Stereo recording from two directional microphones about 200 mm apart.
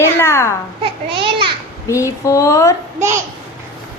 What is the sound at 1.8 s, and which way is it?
Speech, 15° left (ahead or behind).